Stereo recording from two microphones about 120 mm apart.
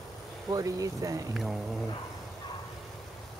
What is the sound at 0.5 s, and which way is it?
Speech, 30° right (ahead or behind).